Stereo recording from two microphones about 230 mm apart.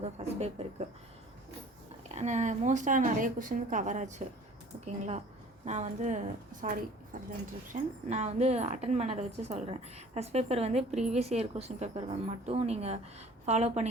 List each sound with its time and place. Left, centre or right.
0.0 s a woman's voice: right
2.0 s a woman's voice: right